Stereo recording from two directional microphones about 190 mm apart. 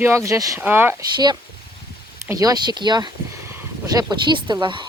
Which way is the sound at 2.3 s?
20° right (ahead or behind).